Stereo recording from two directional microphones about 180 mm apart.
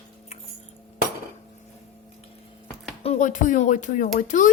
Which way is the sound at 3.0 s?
40° left (ahead or behind).